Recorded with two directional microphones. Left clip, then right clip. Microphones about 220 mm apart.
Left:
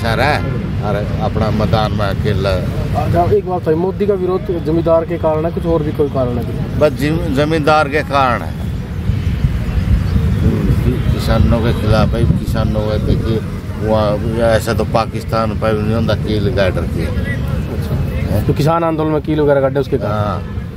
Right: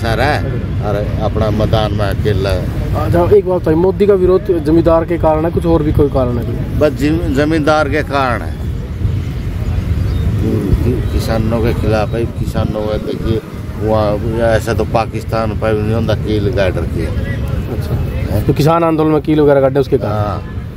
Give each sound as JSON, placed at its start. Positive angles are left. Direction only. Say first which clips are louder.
{"t": 0.0, "sound": "a man's voice", "louder": "even", "side_deg": 0}
{"t": 3.2, "sound": "speech", "louder": "right 4 dB", "side_deg": -45}
{"t": 6.8, "sound": "speech", "louder": "right 1 dB", "side_deg": 0}
{"t": 11.2, "sound": "speech", "louder": "even", "side_deg": -5}
{"t": 18.5, "sound": "speech", "louder": "right 3 dB", "side_deg": -45}
{"t": 20.1, "sound": "speech", "louder": "even", "side_deg": -5}